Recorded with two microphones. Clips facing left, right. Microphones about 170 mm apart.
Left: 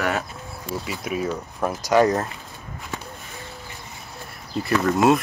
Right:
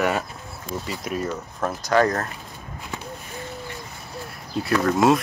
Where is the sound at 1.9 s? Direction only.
15° left (ahead or behind).